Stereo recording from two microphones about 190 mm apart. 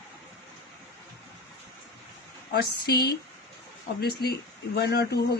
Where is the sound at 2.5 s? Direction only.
55° left (ahead or behind).